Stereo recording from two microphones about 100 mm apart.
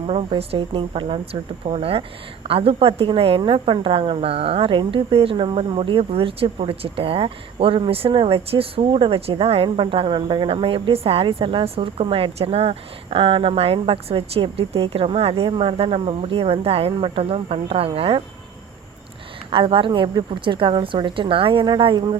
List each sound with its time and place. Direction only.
0.1 s speech: 75° right (ahead or behind)
9.6 s speech: 60° right (ahead or behind)
19.5 s a woman's voice: 65° right (ahead or behind)